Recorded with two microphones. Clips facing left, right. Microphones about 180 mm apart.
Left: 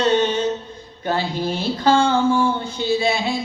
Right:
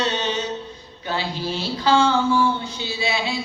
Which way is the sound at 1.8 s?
50° left (ahead or behind).